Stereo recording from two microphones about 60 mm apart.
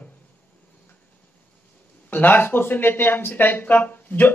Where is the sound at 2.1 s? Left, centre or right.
Left.